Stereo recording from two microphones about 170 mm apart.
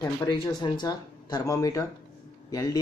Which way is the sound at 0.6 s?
25° left (ahead or behind).